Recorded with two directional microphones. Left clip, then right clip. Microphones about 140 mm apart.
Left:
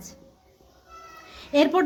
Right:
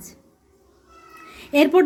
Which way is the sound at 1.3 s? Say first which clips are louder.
Right 3 dB; 20° right (ahead or behind).